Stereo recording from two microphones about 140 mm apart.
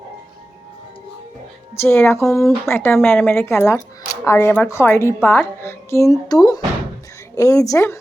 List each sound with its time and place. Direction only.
1.8 s a woman's voice: 15° left (ahead or behind)